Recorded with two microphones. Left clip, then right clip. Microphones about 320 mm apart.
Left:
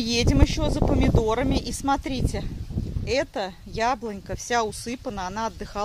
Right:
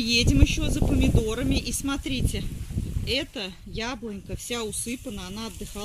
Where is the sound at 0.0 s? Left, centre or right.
Centre.